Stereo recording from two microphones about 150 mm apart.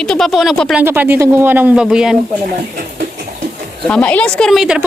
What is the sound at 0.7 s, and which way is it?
Speech, 10° right (ahead or behind).